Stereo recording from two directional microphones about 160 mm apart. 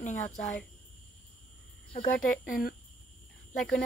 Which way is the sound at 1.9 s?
55° left (ahead or behind).